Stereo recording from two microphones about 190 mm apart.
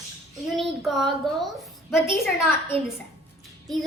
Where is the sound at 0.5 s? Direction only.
Centre (ahead or behind).